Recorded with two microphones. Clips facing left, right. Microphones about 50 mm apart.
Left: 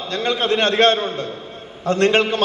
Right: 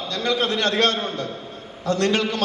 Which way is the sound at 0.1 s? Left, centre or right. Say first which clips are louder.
Left 3 dB; left.